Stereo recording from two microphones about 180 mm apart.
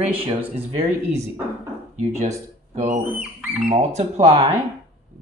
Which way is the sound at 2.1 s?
40° right (ahead or behind).